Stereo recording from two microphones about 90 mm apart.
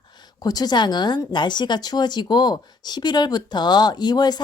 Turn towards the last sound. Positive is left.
turn(degrees=50)  # may be behind; listen again after turning